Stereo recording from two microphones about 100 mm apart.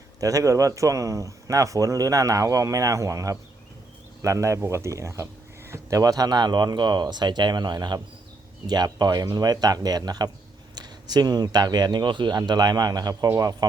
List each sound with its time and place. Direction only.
0.2 s speech: 35° right (ahead or behind)